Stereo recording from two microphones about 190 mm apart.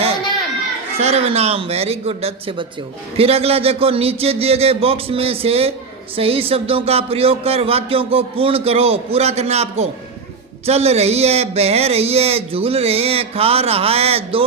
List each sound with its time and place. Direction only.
0.9 s speech: 35° right (ahead or behind)